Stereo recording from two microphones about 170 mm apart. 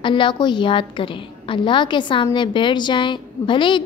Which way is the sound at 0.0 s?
30° left (ahead or behind).